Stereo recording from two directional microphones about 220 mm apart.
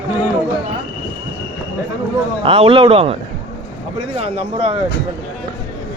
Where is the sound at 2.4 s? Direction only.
25° right (ahead or behind).